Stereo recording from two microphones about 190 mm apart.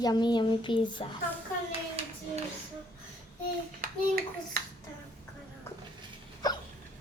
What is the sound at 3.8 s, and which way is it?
Speech, 50° right (ahead or behind).